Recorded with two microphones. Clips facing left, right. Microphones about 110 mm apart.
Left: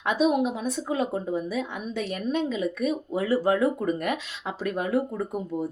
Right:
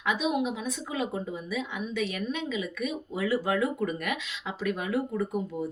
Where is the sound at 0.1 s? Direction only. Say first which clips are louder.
Left 5 dB; 40° left (ahead or behind).